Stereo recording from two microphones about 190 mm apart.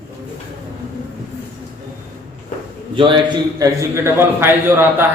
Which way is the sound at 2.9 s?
25° right (ahead or behind).